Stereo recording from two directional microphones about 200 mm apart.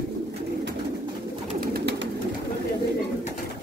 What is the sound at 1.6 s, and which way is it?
Bird, 50° right (ahead or behind).